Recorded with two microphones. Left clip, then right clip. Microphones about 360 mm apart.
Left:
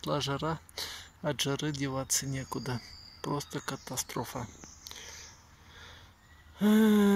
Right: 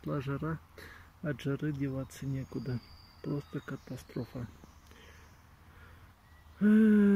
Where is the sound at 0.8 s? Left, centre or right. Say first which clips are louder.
Left 4 dB; centre.